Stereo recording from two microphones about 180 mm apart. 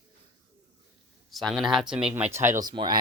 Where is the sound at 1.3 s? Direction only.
Centre (ahead or behind).